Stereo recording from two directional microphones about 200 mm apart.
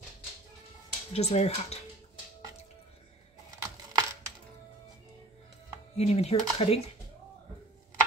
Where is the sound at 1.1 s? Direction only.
30° left (ahead or behind).